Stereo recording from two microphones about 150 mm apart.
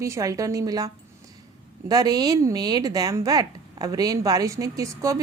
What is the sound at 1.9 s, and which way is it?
A woman's voice, 25° right (ahead or behind).